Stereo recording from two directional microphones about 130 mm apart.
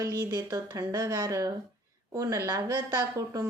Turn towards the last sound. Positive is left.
turn(degrees=-25)  # may be behind; listen again after turning